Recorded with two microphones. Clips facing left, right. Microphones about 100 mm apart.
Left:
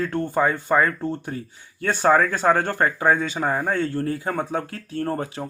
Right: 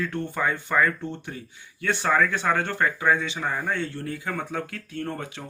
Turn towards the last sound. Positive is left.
turn(degrees=35)  # may be behind; listen again after turning